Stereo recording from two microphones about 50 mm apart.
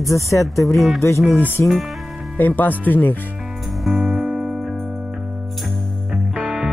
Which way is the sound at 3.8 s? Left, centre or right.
Centre.